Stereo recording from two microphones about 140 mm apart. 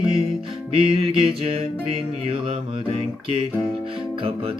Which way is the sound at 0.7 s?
40° right (ahead or behind).